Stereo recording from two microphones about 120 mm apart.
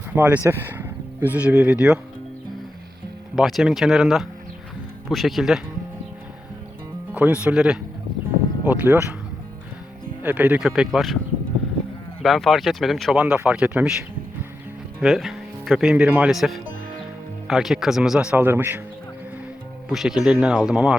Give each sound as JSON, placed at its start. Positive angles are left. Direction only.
{"t": 0.1, "sound": "speech", "side_deg": -15}
{"t": 3.3, "sound": "speech", "side_deg": 0}
{"t": 7.1, "sound": "speech", "side_deg": -10}
{"t": 10.2, "sound": "speech", "side_deg": -15}
{"t": 10.7, "sound": "speech", "side_deg": 0}
{"t": 12.2, "sound": "speech", "side_deg": 0}
{"t": 15.0, "sound": "speech", "side_deg": 0}
{"t": 18.3, "sound": "speech", "side_deg": -15}
{"t": 19.9, "sound": "speech", "side_deg": -5}